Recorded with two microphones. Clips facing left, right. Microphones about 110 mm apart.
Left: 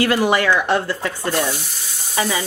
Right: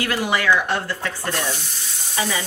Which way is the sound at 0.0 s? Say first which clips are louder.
Left 5 dB; 35° left (ahead or behind).